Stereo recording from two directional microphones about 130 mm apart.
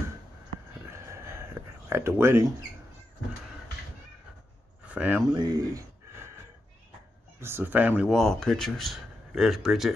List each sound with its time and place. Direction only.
0.8 s a sound: 20° right (ahead or behind)
4.8 s speech: 10° right (ahead or behind)
5.3 s speech: 30° right (ahead or behind)
7.3 s speech: 20° right (ahead or behind)
8.1 s speech: 5° left (ahead or behind)